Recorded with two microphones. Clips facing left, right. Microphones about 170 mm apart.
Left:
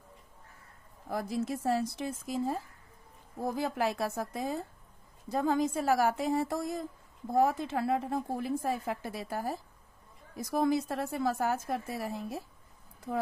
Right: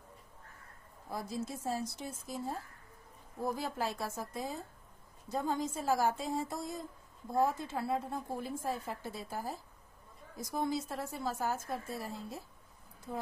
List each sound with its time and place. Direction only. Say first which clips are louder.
1.0 s a woman's voice: left 6 dB; 90° left